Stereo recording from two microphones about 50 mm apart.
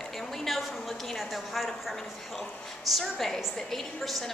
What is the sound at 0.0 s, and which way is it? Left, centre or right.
A woman's voice, centre.